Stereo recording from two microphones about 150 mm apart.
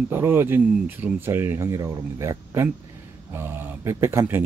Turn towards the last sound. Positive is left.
turn(degrees=-15)  # may be behind; listen again after turning